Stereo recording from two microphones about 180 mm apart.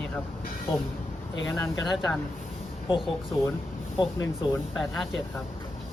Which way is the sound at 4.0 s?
20° left (ahead or behind).